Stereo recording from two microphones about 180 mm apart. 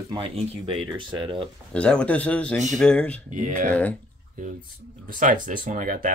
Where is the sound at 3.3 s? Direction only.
45° right (ahead or behind).